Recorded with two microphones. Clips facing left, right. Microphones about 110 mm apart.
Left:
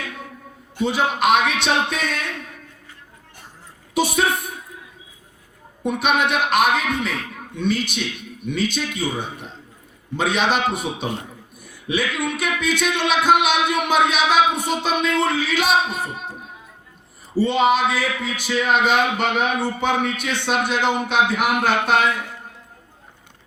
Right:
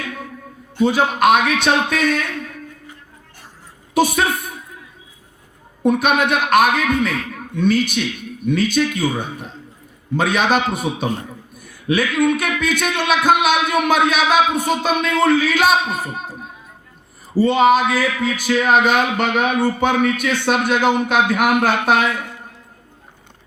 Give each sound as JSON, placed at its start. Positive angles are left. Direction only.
{"t": 0.9, "sound": "a man's voice", "side_deg": -45}
{"t": 3.9, "sound": "a woman's voice", "side_deg": -45}
{"t": 5.8, "sound": "a man's voice", "side_deg": -50}
{"t": 17.3, "sound": "a man's voice", "side_deg": -45}